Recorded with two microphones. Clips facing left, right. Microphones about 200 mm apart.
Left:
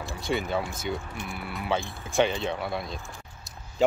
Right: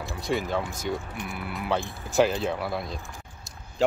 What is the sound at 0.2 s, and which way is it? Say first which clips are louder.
Speech: right 1 dB; centre (ahead or behind).